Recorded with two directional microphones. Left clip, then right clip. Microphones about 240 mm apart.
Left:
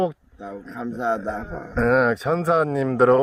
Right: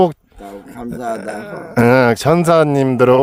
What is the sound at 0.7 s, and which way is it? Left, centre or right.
Speech, centre.